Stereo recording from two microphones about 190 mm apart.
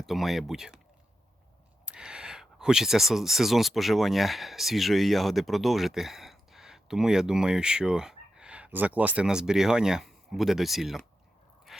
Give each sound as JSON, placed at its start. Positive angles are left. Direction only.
{"t": 0.0, "sound": "speech", "side_deg": 0}
{"t": 1.8, "sound": "speech", "side_deg": -5}
{"t": 11.7, "sound": "pant", "side_deg": 0}